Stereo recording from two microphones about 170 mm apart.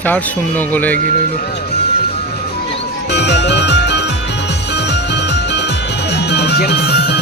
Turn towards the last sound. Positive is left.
turn(degrees=75)  # may be behind; listen again after turning